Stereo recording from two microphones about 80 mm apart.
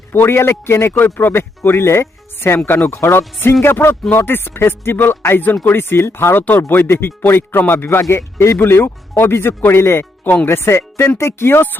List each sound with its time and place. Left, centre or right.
0.1 s a man's voice: left